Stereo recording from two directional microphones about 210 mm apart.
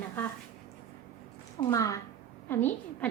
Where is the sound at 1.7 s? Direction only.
15° left (ahead or behind).